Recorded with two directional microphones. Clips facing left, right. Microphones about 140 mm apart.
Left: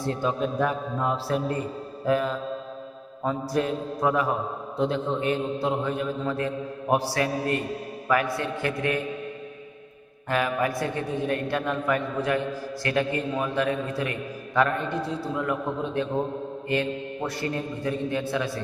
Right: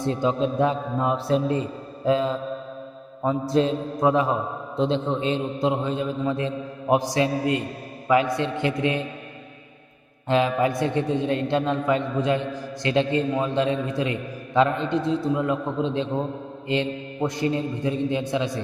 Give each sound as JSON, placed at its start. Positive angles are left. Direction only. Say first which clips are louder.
{"t": 0.0, "sound": "a man's voice", "louder": "right 3 dB", "side_deg": -20}
{"t": 3.5, "sound": "a man's voice", "louder": "right 6 dB", "side_deg": -25}
{"t": 10.2, "sound": "a man's voice", "louder": "right 4 dB", "side_deg": -20}